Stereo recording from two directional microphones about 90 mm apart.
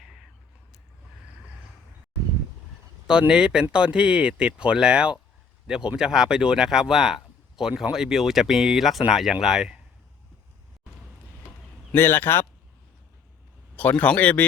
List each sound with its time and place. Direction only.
3.1 s speech: 10° right (ahead or behind)
11.9 s a man's voice: 25° left (ahead or behind)
13.7 s speech: 15° left (ahead or behind)